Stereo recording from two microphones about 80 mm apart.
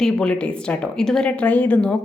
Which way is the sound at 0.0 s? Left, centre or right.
Centre.